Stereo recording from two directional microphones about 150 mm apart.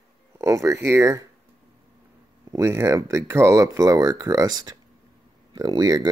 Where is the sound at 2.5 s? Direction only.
20° right (ahead or behind).